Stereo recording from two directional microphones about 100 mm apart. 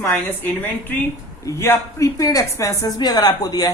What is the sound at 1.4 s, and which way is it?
A woman's voice, 30° left (ahead or behind).